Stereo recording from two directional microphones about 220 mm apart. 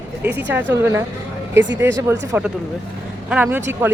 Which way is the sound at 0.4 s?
10° right (ahead or behind).